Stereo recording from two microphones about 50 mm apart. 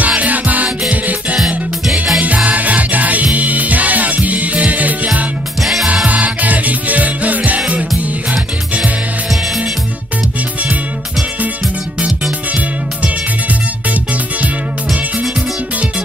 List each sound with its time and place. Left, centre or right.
0.0 s music: right
1.4 s music: centre
2.1 s music: right
5.6 s music: centre
6.0 s music: right